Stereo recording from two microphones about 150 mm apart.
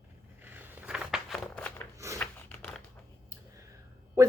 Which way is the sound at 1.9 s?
20° right (ahead or behind).